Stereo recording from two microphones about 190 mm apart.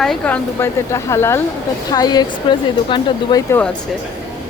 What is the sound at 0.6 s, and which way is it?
A woman's voice, 15° left (ahead or behind).